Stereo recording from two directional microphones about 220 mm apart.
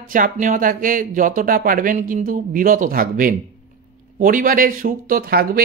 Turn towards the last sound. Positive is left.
turn(degrees=-45)  # may be behind; listen again after turning